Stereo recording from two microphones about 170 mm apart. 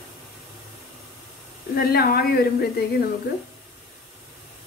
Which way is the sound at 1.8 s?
60° left (ahead or behind).